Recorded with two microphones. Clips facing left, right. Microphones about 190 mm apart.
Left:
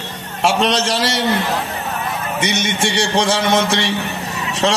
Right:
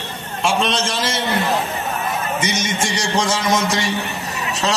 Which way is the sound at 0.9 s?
70° left (ahead or behind).